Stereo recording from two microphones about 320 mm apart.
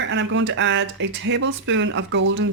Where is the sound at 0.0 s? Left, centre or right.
Right.